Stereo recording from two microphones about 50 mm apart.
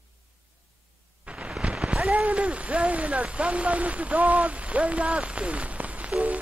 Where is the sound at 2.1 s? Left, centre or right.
Right.